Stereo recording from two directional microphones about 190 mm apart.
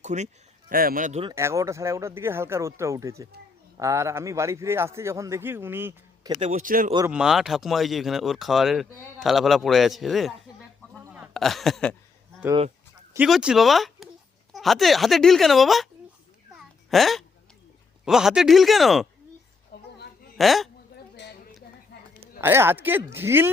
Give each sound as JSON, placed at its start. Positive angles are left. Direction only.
{"t": 0.0, "sound": "speech", "side_deg": -35}
{"t": 0.7, "sound": "speech", "side_deg": -50}
{"t": 1.2, "sound": "a man's voice", "side_deg": -15}
{"t": 6.3, "sound": "a man's voice", "side_deg": -40}
{"t": 7.1, "sound": "speech", "side_deg": -5}
{"t": 13.1, "sound": "speech", "side_deg": -5}
{"t": 16.6, "sound": "a sound", "side_deg": 0}
{"t": 18.0, "sound": "speech", "side_deg": 0}
{"t": 19.7, "sound": "a sound", "side_deg": 55}
{"t": 20.4, "sound": "speech", "side_deg": 0}
{"t": 20.9, "sound": "a sound", "side_deg": 55}
{"t": 22.4, "sound": "a man's voice", "side_deg": -10}